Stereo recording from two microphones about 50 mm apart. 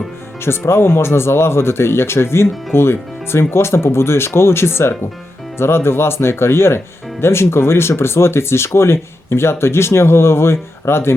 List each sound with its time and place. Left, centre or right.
0.4 s speech: left